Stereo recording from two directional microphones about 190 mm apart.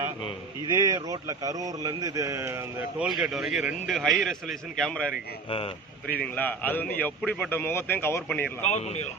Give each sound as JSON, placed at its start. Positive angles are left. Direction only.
{"t": 0.6, "sound": "a man's voice", "side_deg": -20}
{"t": 3.1, "sound": "a man's voice", "side_deg": 0}
{"t": 5.5, "sound": "speech", "side_deg": 30}
{"t": 6.3, "sound": "speech", "side_deg": 10}
{"t": 8.7, "sound": "speech", "side_deg": 35}